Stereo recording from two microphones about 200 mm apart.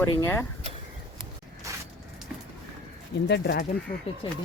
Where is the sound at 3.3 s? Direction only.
55° left (ahead or behind).